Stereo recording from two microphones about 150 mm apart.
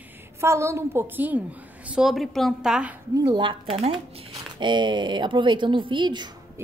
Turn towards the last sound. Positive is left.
turn(degrees=-30)  # may be behind; listen again after turning